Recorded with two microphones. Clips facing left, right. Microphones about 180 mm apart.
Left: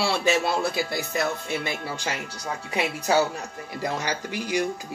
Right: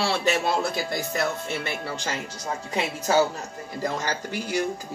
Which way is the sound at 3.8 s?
15° left (ahead or behind).